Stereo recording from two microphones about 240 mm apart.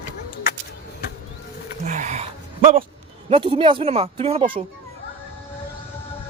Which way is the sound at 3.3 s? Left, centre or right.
Right.